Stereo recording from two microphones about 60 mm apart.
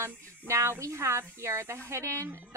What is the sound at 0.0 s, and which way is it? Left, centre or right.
A woman's voice, right.